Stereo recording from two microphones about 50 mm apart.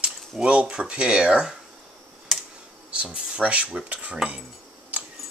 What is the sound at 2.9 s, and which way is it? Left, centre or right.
Speech, centre.